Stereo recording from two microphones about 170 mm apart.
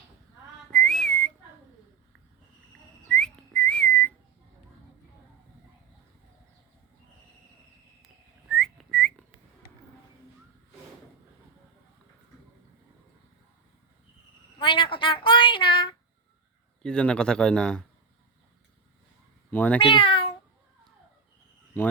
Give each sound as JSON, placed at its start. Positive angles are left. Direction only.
{"t": 0.7, "sound": "whistling", "side_deg": 5}
{"t": 3.1, "sound": "whistling", "side_deg": 5}
{"t": 8.5, "sound": "whistling", "side_deg": 0}
{"t": 14.6, "sound": "speech", "side_deg": 30}
{"t": 16.8, "sound": "speech", "side_deg": 5}
{"t": 19.5, "sound": "speech", "side_deg": 10}
{"t": 19.8, "sound": "speech", "side_deg": 30}